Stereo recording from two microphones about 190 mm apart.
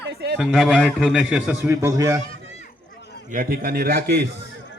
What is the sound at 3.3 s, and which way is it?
Speech, 45° right (ahead or behind).